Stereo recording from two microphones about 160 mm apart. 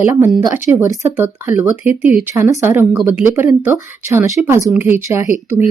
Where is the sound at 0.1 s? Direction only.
15° right (ahead or behind).